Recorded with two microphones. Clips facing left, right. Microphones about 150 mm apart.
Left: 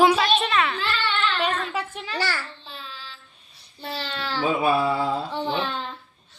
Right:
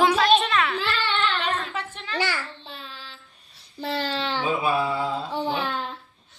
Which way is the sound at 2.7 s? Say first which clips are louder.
Even; 55° right (ahead or behind).